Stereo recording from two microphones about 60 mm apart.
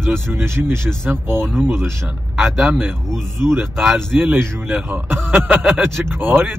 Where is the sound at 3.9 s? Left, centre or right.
Right.